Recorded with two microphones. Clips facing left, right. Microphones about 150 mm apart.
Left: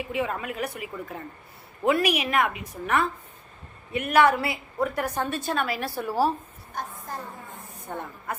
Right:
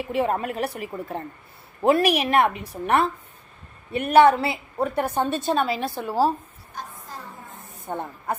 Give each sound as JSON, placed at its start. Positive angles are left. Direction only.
{"t": 0.1, "sound": "a woman's voice", "side_deg": -40}
{"t": 7.9, "sound": "a woman's voice", "side_deg": -25}